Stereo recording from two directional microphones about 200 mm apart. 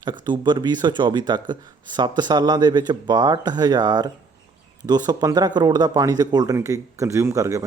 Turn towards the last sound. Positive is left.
turn(degrees=-15)  # may be behind; listen again after turning